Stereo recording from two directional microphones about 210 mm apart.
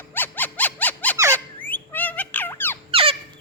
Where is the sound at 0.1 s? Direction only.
10° left (ahead or behind).